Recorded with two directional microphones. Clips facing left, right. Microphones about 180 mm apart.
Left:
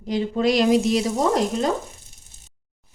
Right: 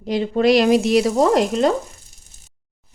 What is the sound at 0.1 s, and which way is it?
Sizzle, 70° right (ahead or behind).